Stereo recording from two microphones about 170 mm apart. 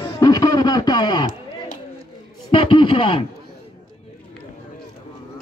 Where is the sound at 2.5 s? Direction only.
30° left (ahead or behind).